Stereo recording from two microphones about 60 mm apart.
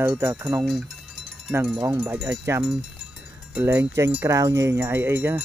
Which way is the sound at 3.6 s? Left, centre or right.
Right.